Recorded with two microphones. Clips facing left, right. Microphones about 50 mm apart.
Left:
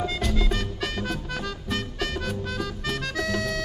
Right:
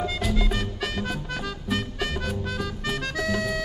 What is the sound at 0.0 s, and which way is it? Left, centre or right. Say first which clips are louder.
Music: even; centre.